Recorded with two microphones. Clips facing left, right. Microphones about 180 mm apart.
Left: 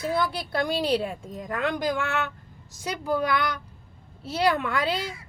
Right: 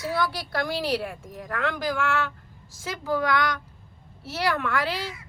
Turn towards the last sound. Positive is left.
turn(degrees=20)  # may be behind; listen again after turning